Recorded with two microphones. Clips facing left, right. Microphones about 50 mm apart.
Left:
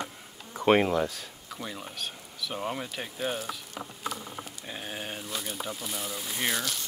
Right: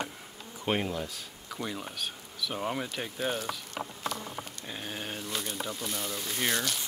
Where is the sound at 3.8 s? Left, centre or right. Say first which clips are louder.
Right 3 dB; right.